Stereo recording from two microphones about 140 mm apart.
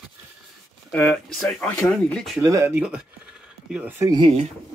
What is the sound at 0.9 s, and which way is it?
Speech, 5° left (ahead or behind).